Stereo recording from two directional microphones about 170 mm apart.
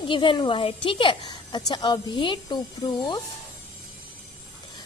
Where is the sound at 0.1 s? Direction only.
30° left (ahead or behind).